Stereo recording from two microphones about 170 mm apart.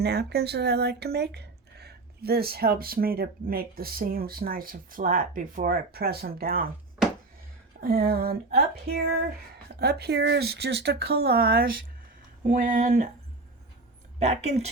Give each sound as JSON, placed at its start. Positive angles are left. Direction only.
{"t": 0.0, "sound": "speech", "side_deg": -75}
{"t": 7.8, "sound": "speech", "side_deg": -65}
{"t": 12.5, "sound": "a sound", "side_deg": -55}
{"t": 14.2, "sound": "speech", "side_deg": -40}